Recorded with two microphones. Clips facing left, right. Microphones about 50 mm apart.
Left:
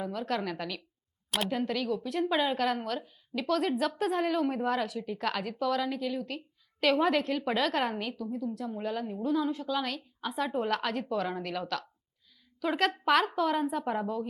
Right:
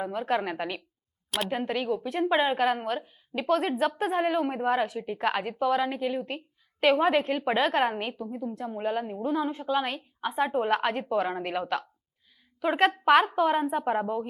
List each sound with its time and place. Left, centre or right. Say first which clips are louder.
0.0 s a woman's voice: right 4 dB; right